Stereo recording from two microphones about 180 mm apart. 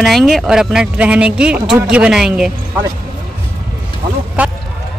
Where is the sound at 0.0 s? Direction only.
Centre (ahead or behind).